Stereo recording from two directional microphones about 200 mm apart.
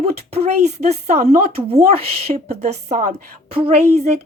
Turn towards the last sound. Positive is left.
turn(degrees=-30)  # may be behind; listen again after turning